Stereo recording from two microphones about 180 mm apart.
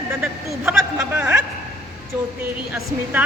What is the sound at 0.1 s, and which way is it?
Speech, 10° right (ahead or behind).